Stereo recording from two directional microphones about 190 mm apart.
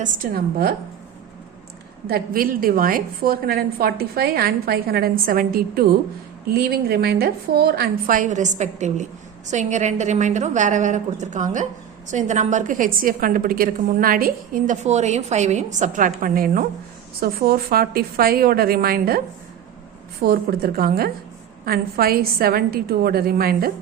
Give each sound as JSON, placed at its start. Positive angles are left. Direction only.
{"t": 0.0, "sound": "a woman's voice", "side_deg": -50}
{"t": 2.0, "sound": "a woman's voice", "side_deg": -50}
{"t": 20.2, "sound": "a woman's voice", "side_deg": -55}